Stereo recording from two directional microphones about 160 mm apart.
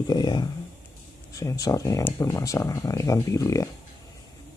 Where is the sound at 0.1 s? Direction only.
25° left (ahead or behind).